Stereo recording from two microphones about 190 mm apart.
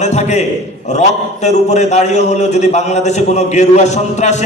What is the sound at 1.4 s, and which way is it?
A man's voice, 35° left (ahead or behind).